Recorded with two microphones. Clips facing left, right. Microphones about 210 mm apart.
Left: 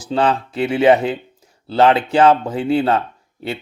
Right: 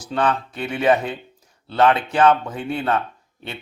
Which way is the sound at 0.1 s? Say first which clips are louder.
Left 4 dB; 25° left (ahead or behind).